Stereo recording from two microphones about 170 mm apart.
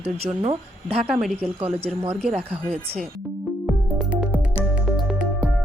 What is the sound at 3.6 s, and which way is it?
Music, 10° right (ahead or behind).